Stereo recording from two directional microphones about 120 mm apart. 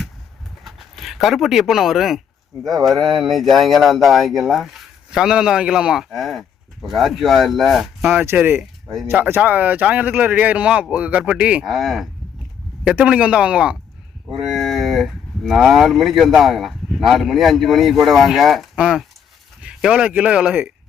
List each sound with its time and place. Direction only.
0.6 s speech: centre (ahead or behind)
8.1 s speech: 20° right (ahead or behind)
11.7 s speech: centre (ahead or behind)